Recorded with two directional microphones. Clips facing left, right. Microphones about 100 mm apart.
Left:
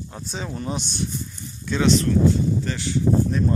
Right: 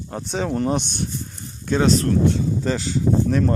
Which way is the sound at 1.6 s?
45° right (ahead or behind).